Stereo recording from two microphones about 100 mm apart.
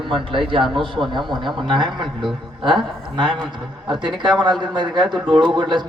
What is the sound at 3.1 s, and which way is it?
A man's voice, 55° right (ahead or behind).